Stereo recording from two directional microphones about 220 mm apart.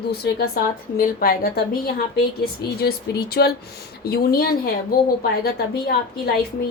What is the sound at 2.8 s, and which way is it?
Speech, 45° left (ahead or behind).